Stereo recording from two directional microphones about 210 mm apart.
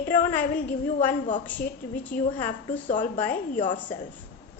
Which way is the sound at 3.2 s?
10° left (ahead or behind).